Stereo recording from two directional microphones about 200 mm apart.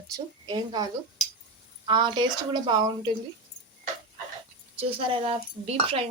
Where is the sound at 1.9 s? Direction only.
25° right (ahead or behind).